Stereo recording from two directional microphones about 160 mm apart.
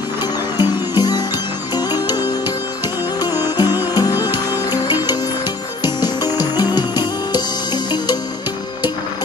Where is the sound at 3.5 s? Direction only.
25° left (ahead or behind).